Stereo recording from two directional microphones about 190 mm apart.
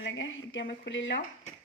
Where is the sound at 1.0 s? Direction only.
70° left (ahead or behind).